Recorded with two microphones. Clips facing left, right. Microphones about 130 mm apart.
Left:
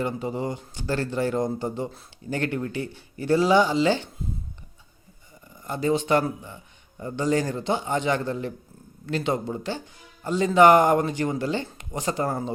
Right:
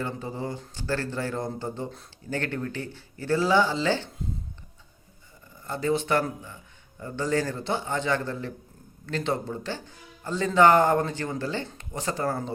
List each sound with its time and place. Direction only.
0.0 s speech: 15° left (ahead or behind)
5.6 s speech: 15° left (ahead or behind)